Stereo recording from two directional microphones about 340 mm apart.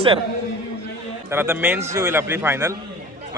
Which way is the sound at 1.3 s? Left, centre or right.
Centre.